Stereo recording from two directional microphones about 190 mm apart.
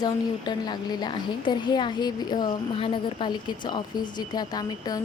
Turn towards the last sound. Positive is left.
turn(degrees=20)  # may be behind; listen again after turning